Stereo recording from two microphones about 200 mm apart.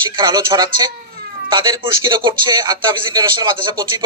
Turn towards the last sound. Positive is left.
turn(degrees=-20)  # may be behind; listen again after turning